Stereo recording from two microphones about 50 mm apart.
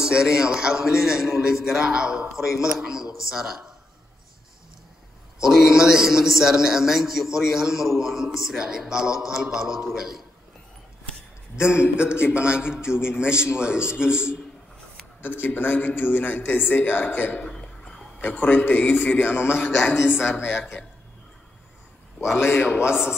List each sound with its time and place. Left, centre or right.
0.0 s a man's voice: centre
5.4 s a man's voice: centre
11.7 s a man's voice: right
15.2 s a man's voice: left
17.5 s a sound: centre
18.2 s a man's voice: left
22.4 s a man's voice: left